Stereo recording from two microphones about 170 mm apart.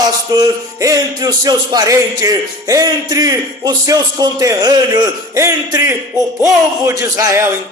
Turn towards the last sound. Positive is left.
turn(degrees=-15)  # may be behind; listen again after turning